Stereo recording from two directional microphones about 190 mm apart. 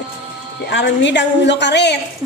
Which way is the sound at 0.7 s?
70° left (ahead or behind).